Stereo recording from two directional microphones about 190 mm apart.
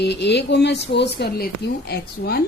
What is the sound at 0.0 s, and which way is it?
Speech, 65° left (ahead or behind).